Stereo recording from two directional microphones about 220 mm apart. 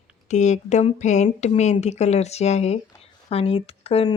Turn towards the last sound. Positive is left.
turn(degrees=25)  # may be behind; listen again after turning